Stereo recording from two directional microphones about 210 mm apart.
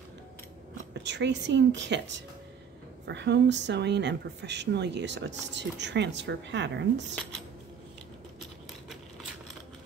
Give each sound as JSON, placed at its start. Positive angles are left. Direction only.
{"t": 1.0, "sound": "speech", "side_deg": -55}